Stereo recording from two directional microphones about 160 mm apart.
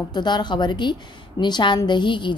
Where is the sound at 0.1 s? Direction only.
25° left (ahead or behind).